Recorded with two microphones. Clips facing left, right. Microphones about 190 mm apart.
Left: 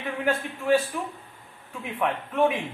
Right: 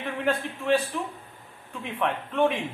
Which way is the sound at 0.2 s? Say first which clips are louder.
Even; centre (ahead or behind).